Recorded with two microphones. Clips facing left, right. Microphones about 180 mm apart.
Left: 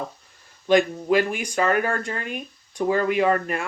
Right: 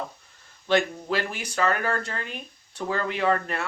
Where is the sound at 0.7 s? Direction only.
15° left (ahead or behind).